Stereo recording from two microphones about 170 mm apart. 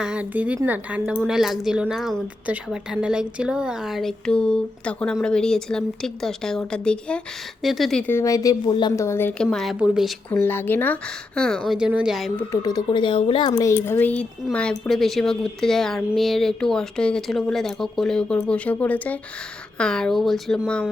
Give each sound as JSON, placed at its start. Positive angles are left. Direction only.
{"t": 0.0, "sound": "a woman's voice", "side_deg": -5}
{"t": 9.0, "sound": "speech", "side_deg": 15}
{"t": 10.4, "sound": "a woman's voice", "side_deg": 10}
{"t": 12.5, "sound": "speech", "side_deg": 20}
{"t": 13.5, "sound": "a woman's voice", "side_deg": 20}